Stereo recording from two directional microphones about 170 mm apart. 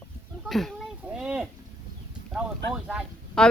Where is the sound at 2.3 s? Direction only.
5° right (ahead or behind).